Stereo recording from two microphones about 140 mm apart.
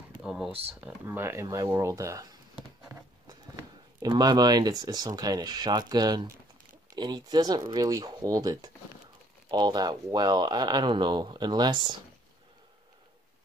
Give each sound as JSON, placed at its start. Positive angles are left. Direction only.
{"t": 0.2, "sound": "speech", "side_deg": -5}
{"t": 0.7, "sound": "speech", "side_deg": -15}